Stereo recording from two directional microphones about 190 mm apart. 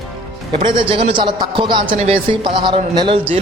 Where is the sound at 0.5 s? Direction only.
25° right (ahead or behind).